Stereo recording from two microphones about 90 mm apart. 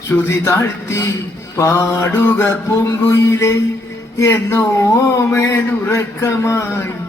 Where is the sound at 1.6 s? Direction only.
30° left (ahead or behind).